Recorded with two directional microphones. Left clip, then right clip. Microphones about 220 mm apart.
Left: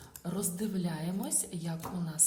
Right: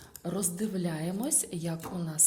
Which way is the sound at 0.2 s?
35° right (ahead or behind).